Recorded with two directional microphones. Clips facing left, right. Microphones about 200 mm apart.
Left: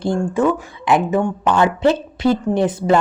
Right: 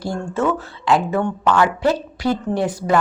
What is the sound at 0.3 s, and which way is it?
A woman's voice, 15° left (ahead or behind).